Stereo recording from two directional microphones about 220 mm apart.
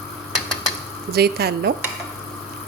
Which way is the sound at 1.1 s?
45° right (ahead or behind).